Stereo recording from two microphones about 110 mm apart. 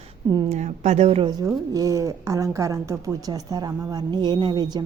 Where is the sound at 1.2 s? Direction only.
40° right (ahead or behind).